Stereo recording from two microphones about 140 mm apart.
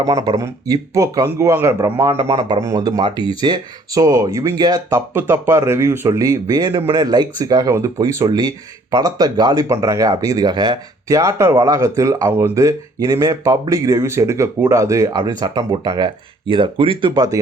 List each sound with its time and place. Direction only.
0.0 s speech: 25° right (ahead or behind)